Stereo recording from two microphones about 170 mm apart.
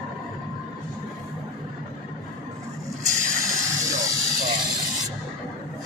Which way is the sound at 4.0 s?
20° right (ahead or behind).